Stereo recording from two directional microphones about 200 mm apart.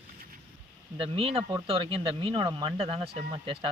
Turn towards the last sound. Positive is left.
turn(degrees=-25)  # may be behind; listen again after turning